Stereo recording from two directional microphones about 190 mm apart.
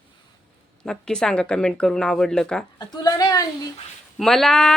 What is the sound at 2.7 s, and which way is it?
Speech, 20° left (ahead or behind).